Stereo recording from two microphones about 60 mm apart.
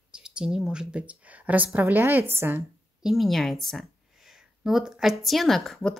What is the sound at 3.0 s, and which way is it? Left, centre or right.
Speech, centre.